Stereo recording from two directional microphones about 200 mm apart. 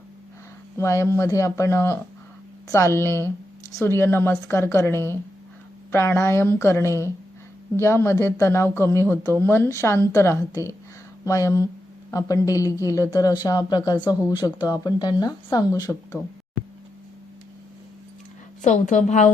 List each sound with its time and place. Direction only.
0.8 s speech: 15° left (ahead or behind)
18.6 s a woman's voice: 40° left (ahead or behind)